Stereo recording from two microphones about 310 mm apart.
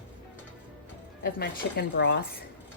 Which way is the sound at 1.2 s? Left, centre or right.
Left.